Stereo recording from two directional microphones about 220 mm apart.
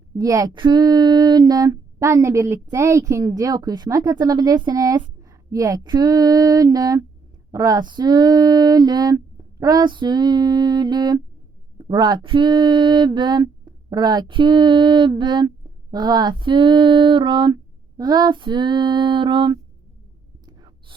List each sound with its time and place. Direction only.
0.2 s speech: 15° right (ahead or behind)
11.8 s female singing: 20° right (ahead or behind)
20.5 s a sound: 20° right (ahead or behind)